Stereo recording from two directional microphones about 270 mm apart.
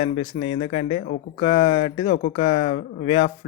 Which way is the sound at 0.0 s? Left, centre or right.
Left.